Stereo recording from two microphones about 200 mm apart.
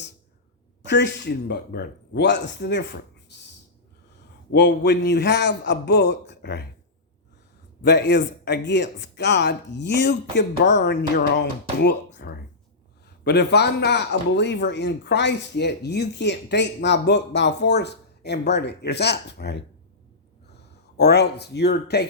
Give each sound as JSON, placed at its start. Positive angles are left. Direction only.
{"t": 0.9, "sound": "speech", "side_deg": 60}
{"t": 3.3, "sound": "owl", "side_deg": 60}
{"t": 4.5, "sound": "speech", "side_deg": 60}
{"t": 7.8, "sound": "speech", "side_deg": 55}
{"t": 20.9, "sound": "speech", "side_deg": 55}